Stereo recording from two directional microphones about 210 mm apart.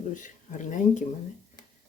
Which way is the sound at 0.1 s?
35° left (ahead or behind).